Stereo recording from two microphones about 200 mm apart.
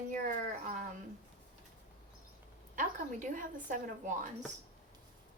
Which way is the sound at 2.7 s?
40° right (ahead or behind).